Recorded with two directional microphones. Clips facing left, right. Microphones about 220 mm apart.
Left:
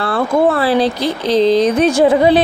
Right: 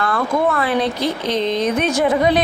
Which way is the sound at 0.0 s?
35° left (ahead or behind).